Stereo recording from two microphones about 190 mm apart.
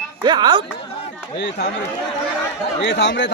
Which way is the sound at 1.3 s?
65° left (ahead or behind).